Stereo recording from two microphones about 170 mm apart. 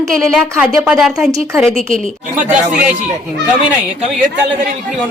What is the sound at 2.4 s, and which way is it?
Speech, 5° right (ahead or behind).